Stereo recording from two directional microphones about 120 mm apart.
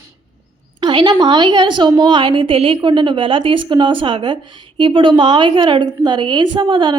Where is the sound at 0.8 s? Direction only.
40° right (ahead or behind).